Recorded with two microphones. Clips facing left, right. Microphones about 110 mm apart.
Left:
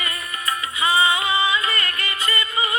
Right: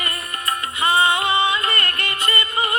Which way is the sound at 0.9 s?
60° right (ahead or behind).